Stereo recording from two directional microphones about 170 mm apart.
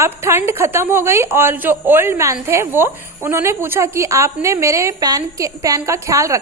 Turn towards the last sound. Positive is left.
turn(degrees=-20)  # may be behind; listen again after turning